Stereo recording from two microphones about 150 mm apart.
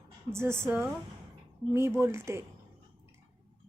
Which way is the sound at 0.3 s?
15° right (ahead or behind).